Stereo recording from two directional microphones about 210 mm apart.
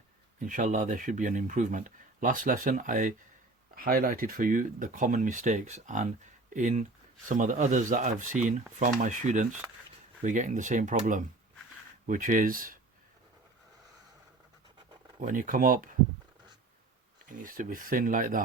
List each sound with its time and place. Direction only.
0.3 s speech: 35° right (ahead or behind)
15.2 s speech: 40° right (ahead or behind)
17.2 s speech: 40° right (ahead or behind)